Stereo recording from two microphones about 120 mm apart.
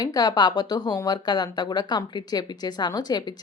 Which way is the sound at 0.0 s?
30° left (ahead or behind).